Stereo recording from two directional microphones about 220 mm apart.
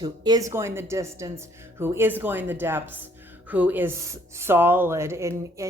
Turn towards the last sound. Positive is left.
turn(degrees=-15)  # may be behind; listen again after turning